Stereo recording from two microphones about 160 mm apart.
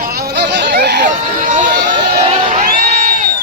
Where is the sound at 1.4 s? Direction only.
50° right (ahead or behind).